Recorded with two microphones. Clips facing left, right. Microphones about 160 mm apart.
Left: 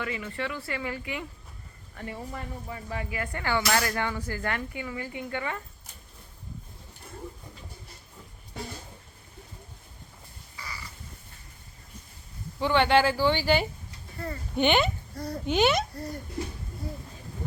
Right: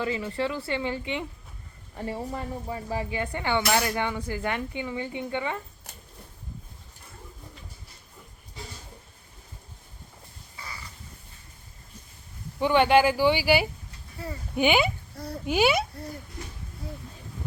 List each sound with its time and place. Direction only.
0.0 s speech: 30° right (ahead or behind)
12.5 s speech: 15° right (ahead or behind)